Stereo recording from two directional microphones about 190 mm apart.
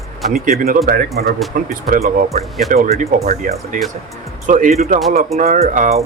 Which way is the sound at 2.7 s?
45° right (ahead or behind).